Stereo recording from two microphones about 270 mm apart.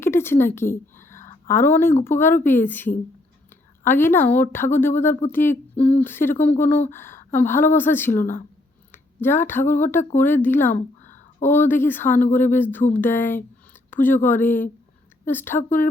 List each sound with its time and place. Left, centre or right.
0.0 s a woman's voice: centre
8.2 s speech: left
8.9 s a woman's voice: centre